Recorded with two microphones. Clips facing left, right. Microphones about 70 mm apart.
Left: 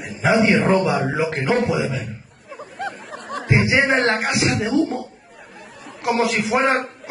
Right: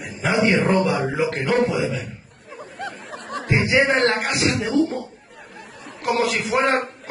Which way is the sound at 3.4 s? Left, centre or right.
Left.